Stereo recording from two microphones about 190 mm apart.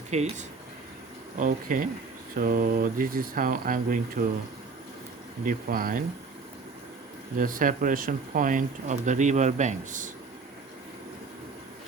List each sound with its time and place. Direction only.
0.1 s speech: 35° right (ahead or behind)
5.5 s speech: 50° right (ahead or behind)
7.3 s speech: 45° right (ahead or behind)